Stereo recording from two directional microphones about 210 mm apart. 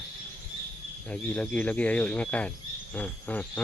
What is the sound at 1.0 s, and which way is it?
Speech, 5° left (ahead or behind).